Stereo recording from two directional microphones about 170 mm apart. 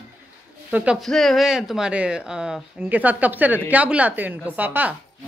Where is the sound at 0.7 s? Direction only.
5° right (ahead or behind).